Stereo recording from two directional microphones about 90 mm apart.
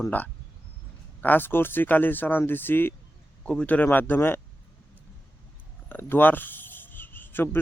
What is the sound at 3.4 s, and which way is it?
Speech, 15° left (ahead or behind).